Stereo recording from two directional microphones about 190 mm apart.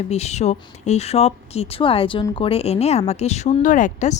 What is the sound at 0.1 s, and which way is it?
Speech, 35° left (ahead or behind).